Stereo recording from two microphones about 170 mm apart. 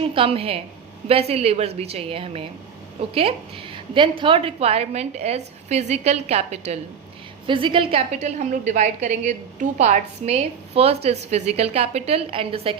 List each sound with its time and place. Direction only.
0.1 s a woman's voice: 35° right (ahead or behind)